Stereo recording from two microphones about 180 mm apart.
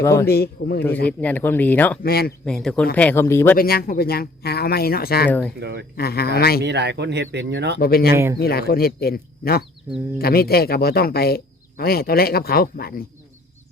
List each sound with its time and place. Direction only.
0.0 s speech: 15° left (ahead or behind)
0.3 s speech: 60° left (ahead or behind)
1.0 s speech: 10° left (ahead or behind)
2.0 s speech: 60° left (ahead or behind)
2.4 s speech: 5° left (ahead or behind)
3.6 s speech: 55° left (ahead or behind)
5.3 s speech: 10° left (ahead or behind)
5.5 s speech: 65° right (ahead or behind)
6.0 s speech: 60° left (ahead or behind)
6.6 s speech: 70° right (ahead or behind)
7.8 s speech: 55° left (ahead or behind)
8.1 s a man's voice: 15° right (ahead or behind)
8.4 s speech: 60° left (ahead or behind)